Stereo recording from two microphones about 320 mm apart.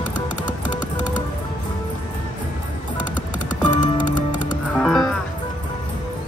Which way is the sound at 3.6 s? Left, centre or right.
Left.